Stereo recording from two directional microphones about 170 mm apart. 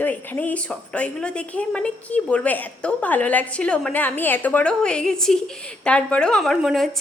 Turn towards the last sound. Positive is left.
turn(degrees=0)  # may be behind; listen again after turning